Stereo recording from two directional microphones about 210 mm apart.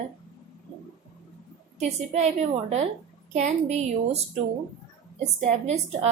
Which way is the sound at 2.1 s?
30° right (ahead or behind).